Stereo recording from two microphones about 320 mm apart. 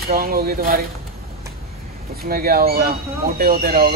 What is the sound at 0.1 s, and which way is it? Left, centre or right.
Speech, right.